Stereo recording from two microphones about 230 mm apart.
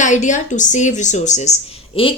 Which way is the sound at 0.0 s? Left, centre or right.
Left.